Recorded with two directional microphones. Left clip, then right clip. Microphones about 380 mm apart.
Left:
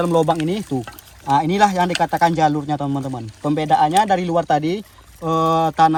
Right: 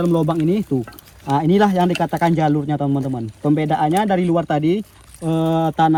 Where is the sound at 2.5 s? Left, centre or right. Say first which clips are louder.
Right 1 dB; left.